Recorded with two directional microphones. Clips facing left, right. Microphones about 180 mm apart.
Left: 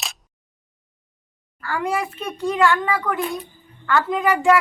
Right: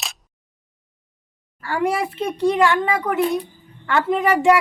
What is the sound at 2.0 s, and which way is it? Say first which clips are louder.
Speech: right 5 dB; 30° right (ahead or behind).